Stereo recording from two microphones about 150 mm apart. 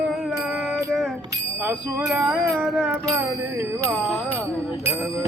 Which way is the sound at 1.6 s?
10° right (ahead or behind).